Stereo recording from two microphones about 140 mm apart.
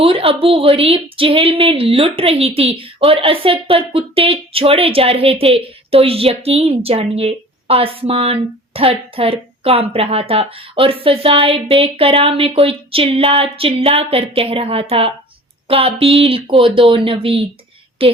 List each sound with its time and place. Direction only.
0.0 s a woman's voice: 40° right (ahead or behind)